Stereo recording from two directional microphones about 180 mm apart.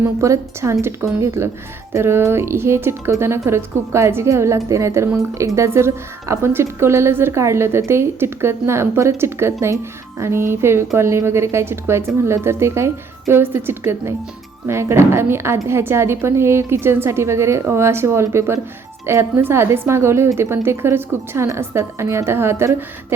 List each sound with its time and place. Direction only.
0.0 s a woman's voice: 15° right (ahead or behind)